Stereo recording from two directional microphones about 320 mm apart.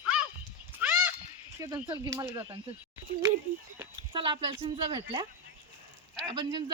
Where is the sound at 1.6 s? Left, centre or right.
Centre.